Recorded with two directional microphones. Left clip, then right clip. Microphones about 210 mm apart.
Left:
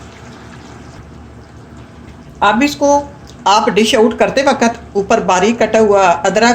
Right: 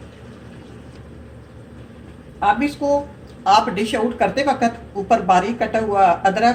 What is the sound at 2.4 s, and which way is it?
Speech, 50° left (ahead or behind).